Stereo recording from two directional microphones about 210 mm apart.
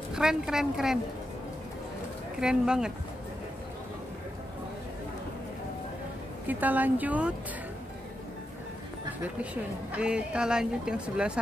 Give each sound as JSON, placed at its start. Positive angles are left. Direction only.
{"t": 0.1, "sound": "a woman's voice", "side_deg": -5}
{"t": 2.4, "sound": "a woman's voice", "side_deg": -5}
{"t": 6.4, "sound": "speech", "side_deg": -10}
{"t": 9.4, "sound": "a woman's voice", "side_deg": -5}